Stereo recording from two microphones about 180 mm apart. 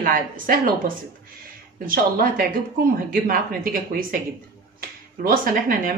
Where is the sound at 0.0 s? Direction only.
50° right (ahead or behind).